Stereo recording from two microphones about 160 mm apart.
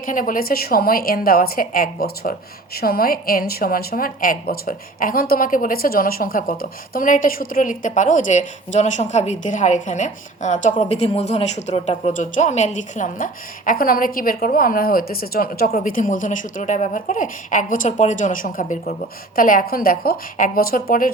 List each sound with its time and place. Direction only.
0.0 s a woman's voice: 55° left (ahead or behind)